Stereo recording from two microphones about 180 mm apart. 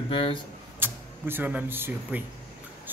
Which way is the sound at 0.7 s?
10° right (ahead or behind).